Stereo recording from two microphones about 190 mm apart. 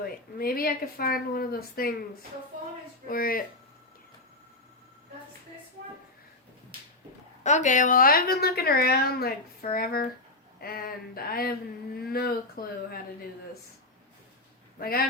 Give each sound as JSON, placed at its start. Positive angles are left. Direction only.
{"t": 0.0, "sound": "a woman's voice", "side_deg": 50}
{"t": 3.1, "sound": "a woman's voice", "side_deg": 50}
{"t": 7.4, "sound": "a woman's voice", "side_deg": 40}
{"t": 14.8, "sound": "a woman's voice", "side_deg": 50}